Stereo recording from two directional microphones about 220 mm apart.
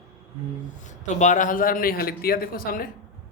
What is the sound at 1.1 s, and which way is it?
A man's voice, 35° left (ahead or behind).